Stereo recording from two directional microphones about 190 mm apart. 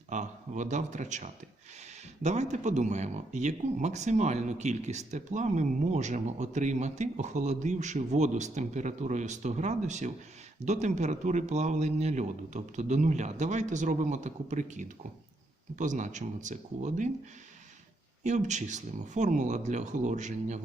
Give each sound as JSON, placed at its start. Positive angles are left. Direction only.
{"t": 0.1, "sound": "speech", "side_deg": -40}
{"t": 18.2, "sound": "speech", "side_deg": -40}